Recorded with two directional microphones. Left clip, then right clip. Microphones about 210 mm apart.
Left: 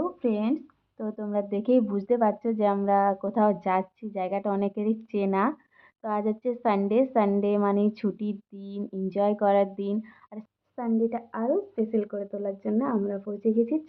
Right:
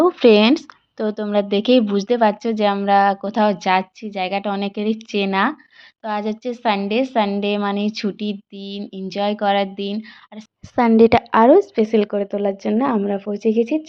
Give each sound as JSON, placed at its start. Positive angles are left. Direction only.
{"t": 0.0, "sound": "speech", "side_deg": -45}
{"t": 0.9, "sound": "a woman's voice", "side_deg": -25}
{"t": 10.8, "sound": "a woman's voice", "side_deg": -55}